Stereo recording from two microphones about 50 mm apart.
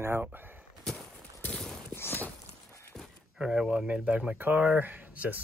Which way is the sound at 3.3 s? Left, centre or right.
Centre.